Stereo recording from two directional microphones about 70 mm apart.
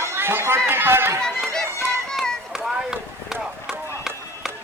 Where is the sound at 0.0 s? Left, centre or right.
Right.